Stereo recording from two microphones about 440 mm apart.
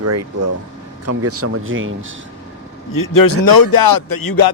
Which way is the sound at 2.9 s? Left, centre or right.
Left.